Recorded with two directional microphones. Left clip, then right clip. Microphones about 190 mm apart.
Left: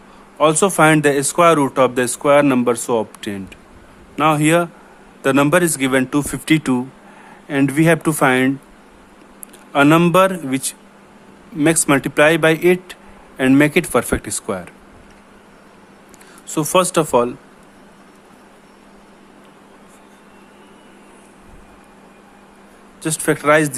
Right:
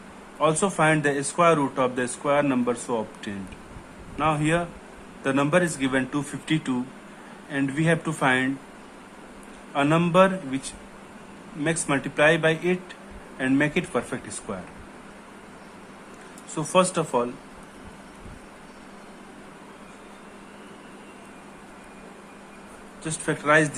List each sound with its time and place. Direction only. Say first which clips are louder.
0.3 s speech: left 9 dB; 60° left (ahead or behind)
9.7 s speech: left 8 dB; 60° left (ahead or behind)
16.6 s speech: left 7 dB; 55° left (ahead or behind)
23.0 s speech: left 8 dB; 55° left (ahead or behind)